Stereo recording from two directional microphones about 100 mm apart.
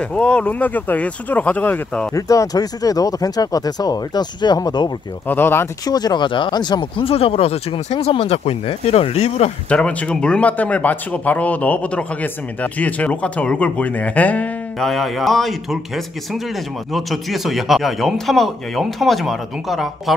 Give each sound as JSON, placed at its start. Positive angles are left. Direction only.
{"t": 0.0, "sound": "speech", "side_deg": 10}
{"t": 2.1, "sound": "speech", "side_deg": 35}
{"t": 5.3, "sound": "speech", "side_deg": 20}
{"t": 5.9, "sound": "speech", "side_deg": 40}
{"t": 9.7, "sound": "speech", "side_deg": 10}
{"t": 14.8, "sound": "speech", "side_deg": 0}